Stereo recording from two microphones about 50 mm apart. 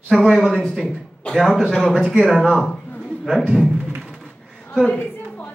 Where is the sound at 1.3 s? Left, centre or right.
Centre.